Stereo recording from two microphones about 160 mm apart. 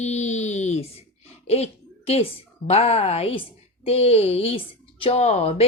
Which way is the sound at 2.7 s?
40° left (ahead or behind).